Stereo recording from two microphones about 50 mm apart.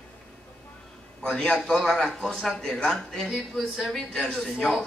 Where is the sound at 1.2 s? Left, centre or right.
Centre.